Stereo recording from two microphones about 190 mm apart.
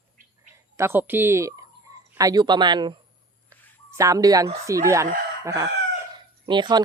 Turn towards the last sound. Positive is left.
turn(degrees=-25)  # may be behind; listen again after turning